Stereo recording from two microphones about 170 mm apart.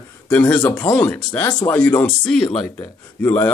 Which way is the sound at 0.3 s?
10° left (ahead or behind).